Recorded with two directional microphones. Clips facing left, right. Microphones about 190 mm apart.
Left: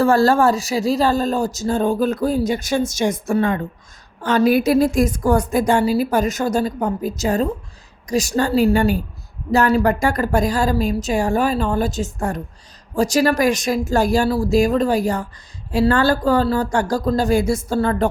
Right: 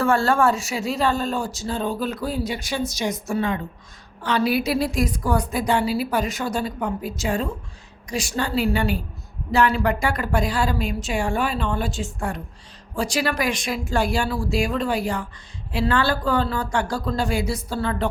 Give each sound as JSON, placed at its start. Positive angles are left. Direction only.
{"t": 0.0, "sound": "a woman's voice", "side_deg": 35}